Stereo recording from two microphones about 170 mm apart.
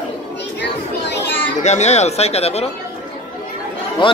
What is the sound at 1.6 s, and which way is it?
Speech, 40° left (ahead or behind).